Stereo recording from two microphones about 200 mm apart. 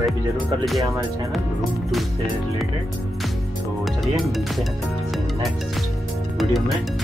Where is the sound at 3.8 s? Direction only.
Centre (ahead or behind).